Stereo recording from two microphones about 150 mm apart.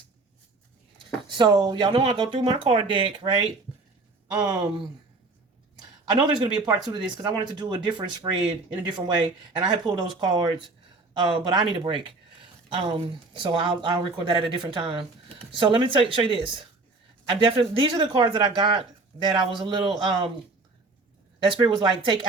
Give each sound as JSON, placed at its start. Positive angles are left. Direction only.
{"t": 1.3, "sound": "speech", "side_deg": -30}
{"t": 6.1, "sound": "speech", "side_deg": -25}
{"t": 21.4, "sound": "speech", "side_deg": -30}